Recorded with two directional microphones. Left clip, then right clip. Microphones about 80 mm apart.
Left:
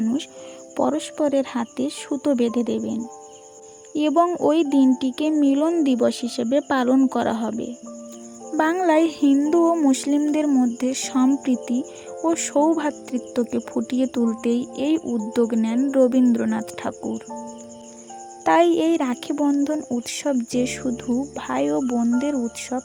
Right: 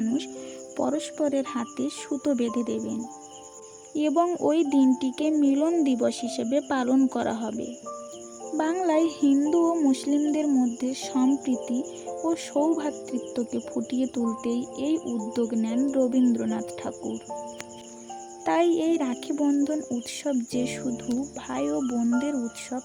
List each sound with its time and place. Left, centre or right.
0.8 s speech: left
8.8 s speech: left
18.4 s speech: left